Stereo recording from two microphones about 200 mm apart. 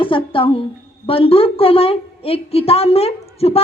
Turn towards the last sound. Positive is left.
turn(degrees=30)  # may be behind; listen again after turning